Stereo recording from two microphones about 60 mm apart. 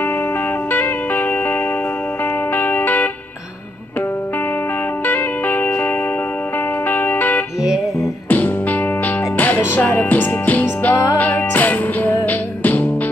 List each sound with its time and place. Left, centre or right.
0.7 s music: left
5.0 s music: left
6.9 s music: left
7.6 s music: centre
8.3 s music: left